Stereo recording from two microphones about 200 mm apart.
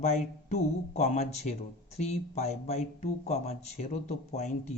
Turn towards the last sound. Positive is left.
turn(degrees=35)  # may be behind; listen again after turning